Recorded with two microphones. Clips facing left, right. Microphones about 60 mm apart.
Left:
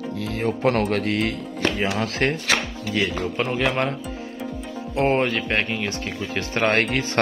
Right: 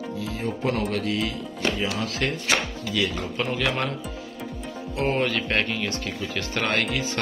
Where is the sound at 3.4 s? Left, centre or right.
Left.